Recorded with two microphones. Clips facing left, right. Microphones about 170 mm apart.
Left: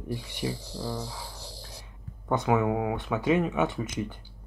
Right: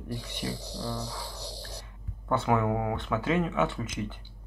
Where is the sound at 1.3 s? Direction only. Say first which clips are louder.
Right 4 dB; 70° right (ahead or behind).